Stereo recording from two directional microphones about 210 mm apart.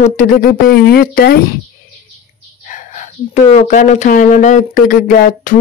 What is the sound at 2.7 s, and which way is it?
Speech, 35° left (ahead or behind).